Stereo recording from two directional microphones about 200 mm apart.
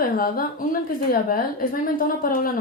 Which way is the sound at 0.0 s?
45° left (ahead or behind).